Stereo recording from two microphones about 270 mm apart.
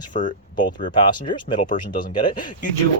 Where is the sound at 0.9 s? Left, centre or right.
Centre.